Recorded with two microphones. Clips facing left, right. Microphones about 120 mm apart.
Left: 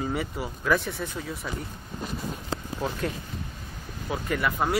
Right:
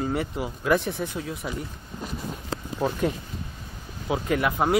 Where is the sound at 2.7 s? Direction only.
15° right (ahead or behind).